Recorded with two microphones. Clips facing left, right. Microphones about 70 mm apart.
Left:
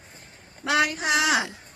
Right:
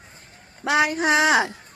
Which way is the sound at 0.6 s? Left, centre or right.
Right.